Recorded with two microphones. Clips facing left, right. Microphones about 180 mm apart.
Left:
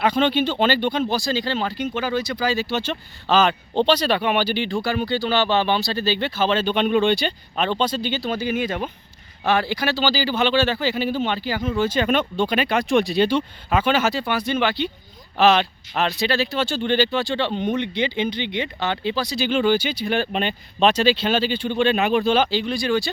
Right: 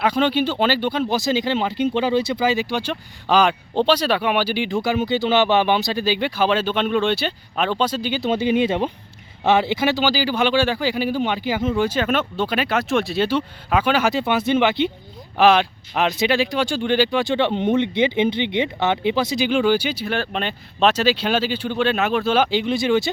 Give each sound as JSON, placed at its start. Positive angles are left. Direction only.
{"t": 0.0, "sound": "speech", "side_deg": -10}
{"t": 1.1, "sound": "speech", "side_deg": -20}
{"t": 8.2, "sound": "speech", "side_deg": -20}
{"t": 11.7, "sound": "speech", "side_deg": -5}
{"t": 14.1, "sound": "speech", "side_deg": -20}
{"t": 19.5, "sound": "speech", "side_deg": -10}
{"t": 22.4, "sound": "speech", "side_deg": -20}